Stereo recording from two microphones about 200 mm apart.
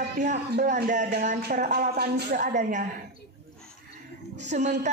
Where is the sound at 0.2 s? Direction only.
35° right (ahead or behind).